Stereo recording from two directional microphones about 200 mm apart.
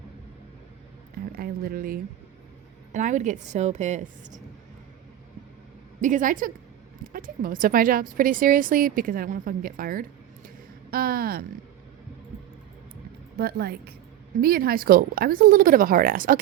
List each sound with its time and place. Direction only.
1.2 s a woman's voice: 50° right (ahead or behind)
6.0 s a woman's voice: 40° right (ahead or behind)
13.4 s speech: 50° right (ahead or behind)